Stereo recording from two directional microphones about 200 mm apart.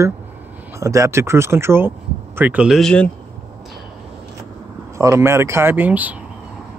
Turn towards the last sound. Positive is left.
turn(degrees=-10)  # may be behind; listen again after turning